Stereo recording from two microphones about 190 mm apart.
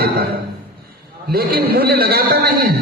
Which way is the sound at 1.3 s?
55° right (ahead or behind).